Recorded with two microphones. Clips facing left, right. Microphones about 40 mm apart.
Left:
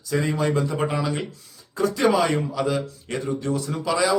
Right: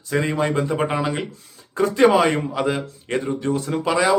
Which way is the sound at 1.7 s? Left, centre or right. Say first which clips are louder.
Right 5 dB; right.